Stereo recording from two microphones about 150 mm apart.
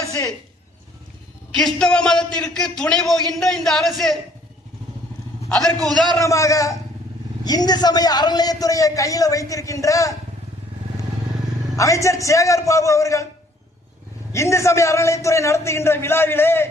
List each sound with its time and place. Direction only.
1.5 s a man's voice: 5° left (ahead or behind)
5.8 s a man's voice: 5° left (ahead or behind)
6.1 s a man's voice: 20° left (ahead or behind)
11.8 s a man's voice: 20° left (ahead or behind)
14.3 s a man's voice: 20° left (ahead or behind)